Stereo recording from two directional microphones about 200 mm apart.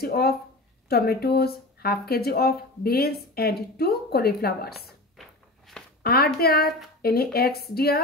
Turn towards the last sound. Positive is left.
turn(degrees=50)  # may be behind; listen again after turning